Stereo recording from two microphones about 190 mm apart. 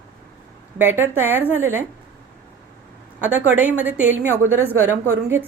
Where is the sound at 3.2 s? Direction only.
10° right (ahead or behind).